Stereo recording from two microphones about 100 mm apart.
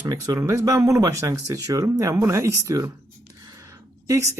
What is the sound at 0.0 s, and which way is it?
Speech, 40° right (ahead or behind).